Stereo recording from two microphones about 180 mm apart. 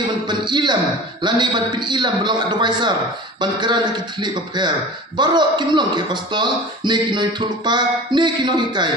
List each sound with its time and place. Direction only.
0.3 s a man's voice: 25° right (ahead or behind)